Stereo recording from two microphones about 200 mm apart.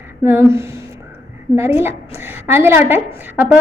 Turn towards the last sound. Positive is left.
turn(degrees=-10)  # may be behind; listen again after turning